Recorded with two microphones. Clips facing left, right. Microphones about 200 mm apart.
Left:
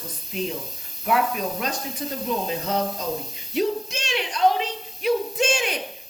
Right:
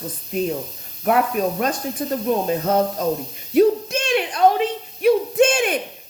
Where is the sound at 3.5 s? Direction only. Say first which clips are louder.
Right 9 dB; 55° right (ahead or behind).